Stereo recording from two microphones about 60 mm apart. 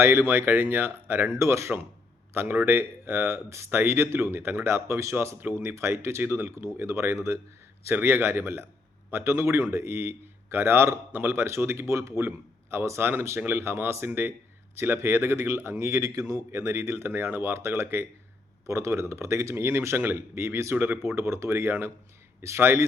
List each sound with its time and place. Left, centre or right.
0.0 s a man's voice: right
1.4 s a man's voice: right
2.3 s a man's voice: right
5.1 s a man's voice: right
20.7 s a man's voice: right
21.0 s a man's voice: right
21.7 s a man's voice: right